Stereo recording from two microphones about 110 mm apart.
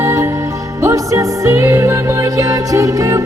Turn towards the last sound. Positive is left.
turn(degrees=-30)  # may be behind; listen again after turning